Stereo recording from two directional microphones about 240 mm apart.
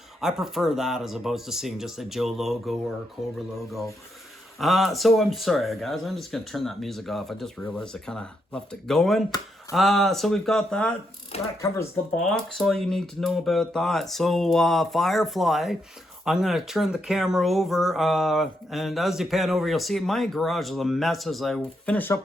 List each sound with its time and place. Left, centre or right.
0.2 s speech: centre
4.5 s speech: centre